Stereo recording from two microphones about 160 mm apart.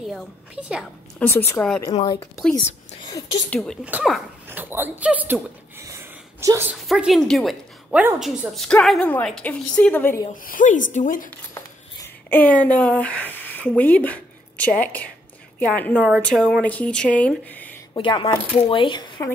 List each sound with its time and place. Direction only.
0.0 s a woman's voice: centre (ahead or behind)
1.2 s a woman's voice: 15° left (ahead or behind)
3.0 s speech: 25° left (ahead or behind)
3.4 s a woman's voice: 5° left (ahead or behind); by 6.7 s 20° right (ahead or behind)
6.7 s a woman's voice: 5° right (ahead or behind); by 10.2 s 10° left (ahead or behind)
10.3 s a woman's voice: 60° left (ahead or behind)
12.0 s a woman's voice: 10° left (ahead or behind)
17.9 s speech: 30° left (ahead or behind)